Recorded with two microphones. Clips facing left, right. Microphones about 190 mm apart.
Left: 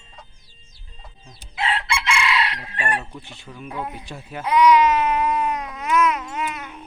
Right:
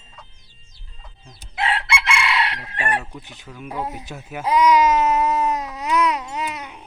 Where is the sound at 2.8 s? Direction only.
15° right (ahead or behind).